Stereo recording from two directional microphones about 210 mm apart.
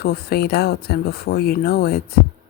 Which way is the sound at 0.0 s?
50° left (ahead or behind).